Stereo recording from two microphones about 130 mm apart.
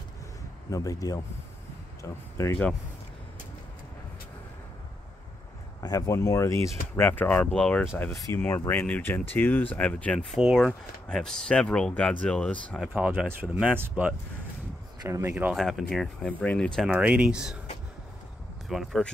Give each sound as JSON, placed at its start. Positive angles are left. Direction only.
{"t": 0.7, "sound": "speech", "side_deg": 25}
{"t": 2.4, "sound": "speech", "side_deg": 20}
{"t": 5.8, "sound": "speech", "side_deg": 25}
{"t": 8.0, "sound": "speech", "side_deg": 25}
{"t": 10.4, "sound": "speech", "side_deg": 0}
{"t": 12.9, "sound": "speech", "side_deg": -10}
{"t": 15.5, "sound": "speech", "side_deg": 0}
{"t": 16.9, "sound": "speech", "side_deg": -10}
{"t": 18.7, "sound": "speech", "side_deg": 0}